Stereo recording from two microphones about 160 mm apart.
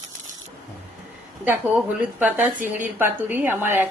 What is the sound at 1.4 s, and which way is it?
A woman's voice, 10° right (ahead or behind).